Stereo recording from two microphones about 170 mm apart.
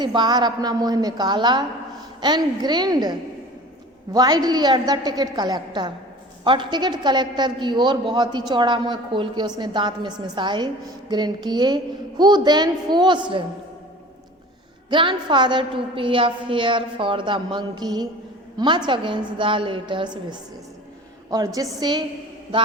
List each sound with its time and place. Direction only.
0.0 s a woman's voice: 25° right (ahead or behind)
14.8 s a woman's voice: 30° right (ahead or behind)